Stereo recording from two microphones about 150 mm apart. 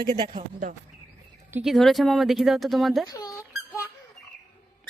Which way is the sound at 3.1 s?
25° left (ahead or behind).